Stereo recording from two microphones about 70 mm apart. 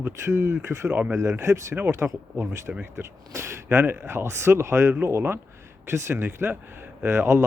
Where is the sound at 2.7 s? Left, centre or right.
Centre.